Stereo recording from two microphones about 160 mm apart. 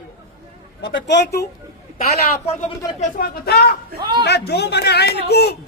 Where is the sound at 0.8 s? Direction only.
90° left.